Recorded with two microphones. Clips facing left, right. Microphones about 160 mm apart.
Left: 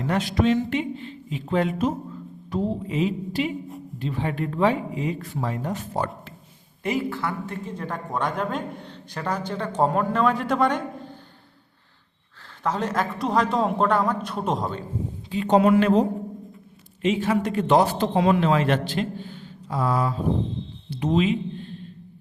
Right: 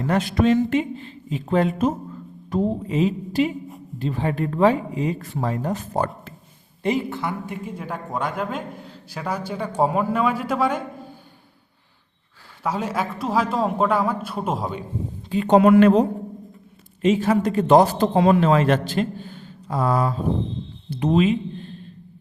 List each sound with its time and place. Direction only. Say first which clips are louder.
0.1 s a man's voice: right 3 dB; 50° right (ahead or behind)
6.8 s a man's voice: right 2 dB; 20° right (ahead or behind); by 11.2 s 5° right (ahead or behind)
12.6 s a man's voice: even; 10° right (ahead or behind)
15.3 s speech: right 4 dB; 55° right (ahead or behind)
17.0 s a man's voice: right 4 dB; 40° right (ahead or behind)